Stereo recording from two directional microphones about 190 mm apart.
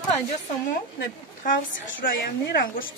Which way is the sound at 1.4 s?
45° left (ahead or behind).